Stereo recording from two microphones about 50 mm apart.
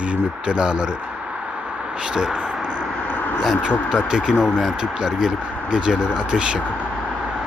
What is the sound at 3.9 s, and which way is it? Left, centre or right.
Speech, centre.